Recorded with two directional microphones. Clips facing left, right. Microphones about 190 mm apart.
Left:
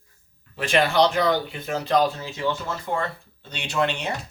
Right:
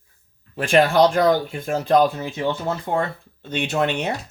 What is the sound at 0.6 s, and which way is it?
Speech, 50° right (ahead or behind).